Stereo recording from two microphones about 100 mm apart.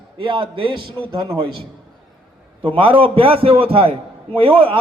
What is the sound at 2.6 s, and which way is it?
A man's voice, 65° right (ahead or behind).